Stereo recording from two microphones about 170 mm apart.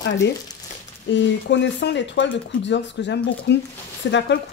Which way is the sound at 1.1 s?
90° left.